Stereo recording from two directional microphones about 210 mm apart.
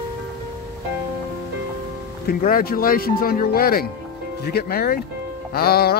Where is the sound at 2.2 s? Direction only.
45° left (ahead or behind).